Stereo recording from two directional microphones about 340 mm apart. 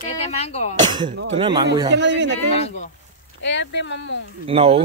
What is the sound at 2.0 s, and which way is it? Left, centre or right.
Speech, right.